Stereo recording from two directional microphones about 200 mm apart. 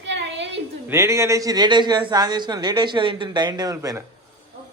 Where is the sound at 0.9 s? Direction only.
15° right (ahead or behind).